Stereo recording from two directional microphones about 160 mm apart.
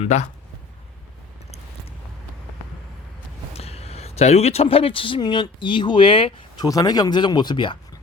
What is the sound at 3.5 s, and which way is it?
Speech, 40° left (ahead or behind).